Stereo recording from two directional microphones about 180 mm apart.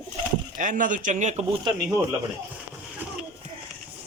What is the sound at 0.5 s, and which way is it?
Speech, 45° right (ahead or behind).